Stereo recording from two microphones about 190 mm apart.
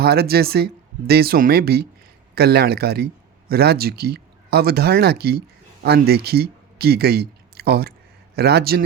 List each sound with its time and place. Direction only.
0.0 s speech: 55° right (ahead or behind)